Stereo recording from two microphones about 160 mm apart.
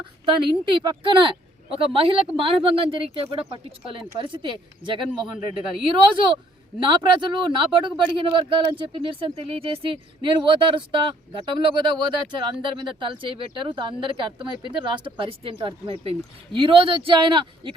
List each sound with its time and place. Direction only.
0.3 s a man's voice: 30° right (ahead or behind)